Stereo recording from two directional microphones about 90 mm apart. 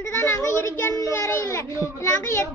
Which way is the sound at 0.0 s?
30° left (ahead or behind).